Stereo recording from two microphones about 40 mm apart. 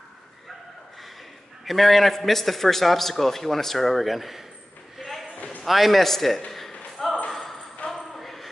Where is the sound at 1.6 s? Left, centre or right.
Centre.